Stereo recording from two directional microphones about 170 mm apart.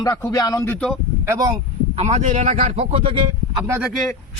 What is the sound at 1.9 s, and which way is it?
Speech, 40° right (ahead or behind).